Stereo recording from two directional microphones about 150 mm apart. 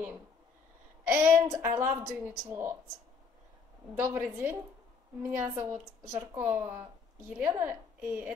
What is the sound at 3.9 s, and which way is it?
A woman's voice, 15° right (ahead or behind).